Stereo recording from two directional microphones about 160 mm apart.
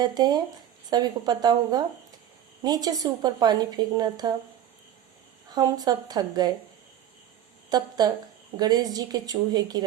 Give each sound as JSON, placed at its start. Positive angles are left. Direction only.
{"t": 0.0, "sound": "a woman's voice", "side_deg": -25}
{"t": 5.5, "sound": "a woman's voice", "side_deg": -25}
{"t": 7.7, "sound": "a woman's voice", "side_deg": -25}